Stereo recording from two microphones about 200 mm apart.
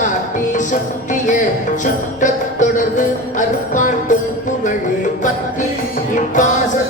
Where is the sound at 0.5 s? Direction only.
40° left (ahead or behind).